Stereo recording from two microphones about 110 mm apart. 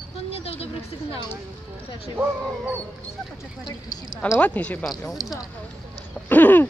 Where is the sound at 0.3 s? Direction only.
65° left (ahead or behind).